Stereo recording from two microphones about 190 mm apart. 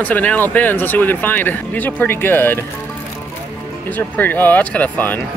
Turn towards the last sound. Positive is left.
turn(degrees=10)  # may be behind; listen again after turning